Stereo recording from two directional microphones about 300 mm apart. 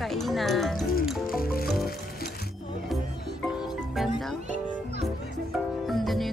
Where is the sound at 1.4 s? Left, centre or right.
Left.